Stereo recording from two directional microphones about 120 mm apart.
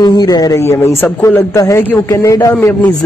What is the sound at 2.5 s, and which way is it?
Speech, 15° left (ahead or behind).